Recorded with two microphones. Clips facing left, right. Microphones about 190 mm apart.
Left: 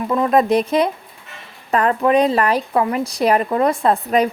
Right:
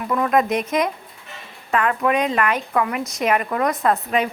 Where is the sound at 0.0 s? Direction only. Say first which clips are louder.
Left 3 dB; 25° left (ahead or behind).